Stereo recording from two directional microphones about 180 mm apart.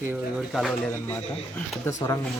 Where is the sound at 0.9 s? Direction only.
10° left (ahead or behind).